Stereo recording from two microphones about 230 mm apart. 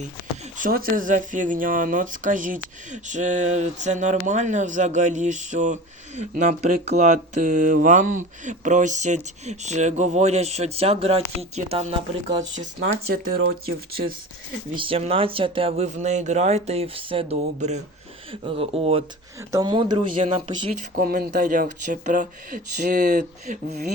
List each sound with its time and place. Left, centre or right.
0.5 s speech: right
14.8 s speech: right
20.9 s speech: right